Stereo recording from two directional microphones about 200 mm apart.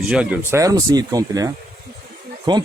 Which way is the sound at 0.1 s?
5° right (ahead or behind).